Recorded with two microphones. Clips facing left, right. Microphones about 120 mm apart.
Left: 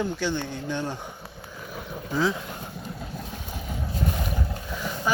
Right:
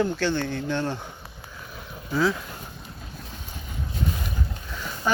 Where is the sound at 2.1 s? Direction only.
20° left (ahead or behind).